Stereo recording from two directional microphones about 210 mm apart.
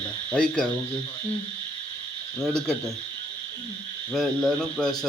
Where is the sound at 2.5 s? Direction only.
5° left (ahead or behind).